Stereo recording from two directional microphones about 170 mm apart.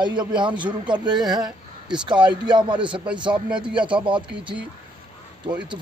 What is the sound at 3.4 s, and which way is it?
Speech, 5° right (ahead or behind).